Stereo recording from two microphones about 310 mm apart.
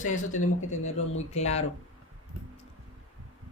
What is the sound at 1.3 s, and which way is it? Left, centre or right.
Speech, left.